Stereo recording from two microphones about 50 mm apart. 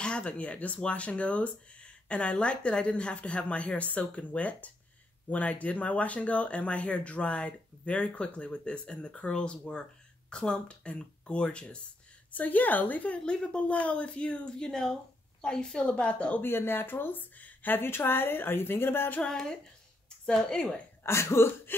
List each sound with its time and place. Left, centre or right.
0.0 s speech: centre
12.3 s a woman's voice: left
14.6 s speech: centre
16.4 s speech: left
19.2 s speech: centre
21.0 s speech: left